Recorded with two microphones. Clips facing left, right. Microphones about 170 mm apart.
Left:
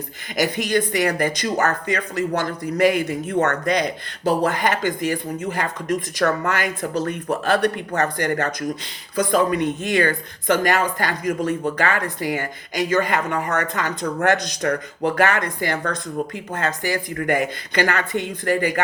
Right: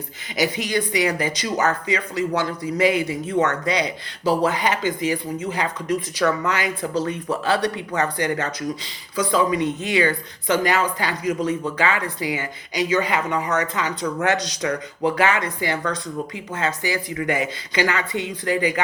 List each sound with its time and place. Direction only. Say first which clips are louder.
0.3 s speech: left 2 dB; 55° left (ahead or behind)